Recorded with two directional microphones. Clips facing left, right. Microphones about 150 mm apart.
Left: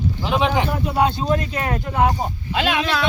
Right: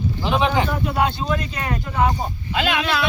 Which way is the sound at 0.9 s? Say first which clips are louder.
Left 5 dB; 35° left (ahead or behind).